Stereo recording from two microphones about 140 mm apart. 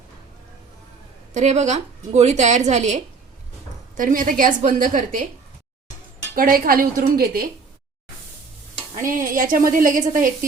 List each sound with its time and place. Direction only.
1.3 s a woman's voice: 55° right (ahead or behind)
3.9 s a woman's voice: 75° right (ahead or behind)
6.3 s a woman's voice: 90° right
9.0 s a woman's voice: 75° right (ahead or behind)